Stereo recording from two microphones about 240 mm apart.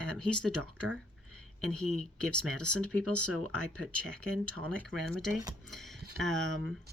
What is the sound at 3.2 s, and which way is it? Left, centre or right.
Speech, right.